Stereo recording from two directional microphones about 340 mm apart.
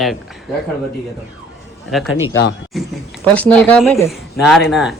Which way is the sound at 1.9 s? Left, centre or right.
Centre.